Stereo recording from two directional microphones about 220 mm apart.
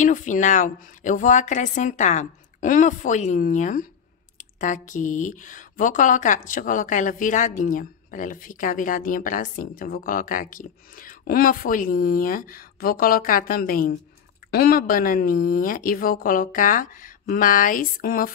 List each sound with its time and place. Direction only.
0.0 s speech: 35° left (ahead or behind)